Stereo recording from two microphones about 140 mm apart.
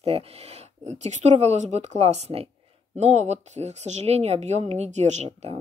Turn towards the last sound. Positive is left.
turn(degrees=-50)  # may be behind; listen again after turning